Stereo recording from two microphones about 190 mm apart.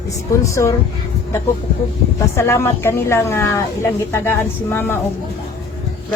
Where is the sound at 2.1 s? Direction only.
15° left (ahead or behind).